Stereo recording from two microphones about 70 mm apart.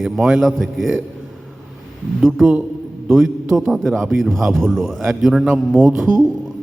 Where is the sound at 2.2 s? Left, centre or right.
Centre.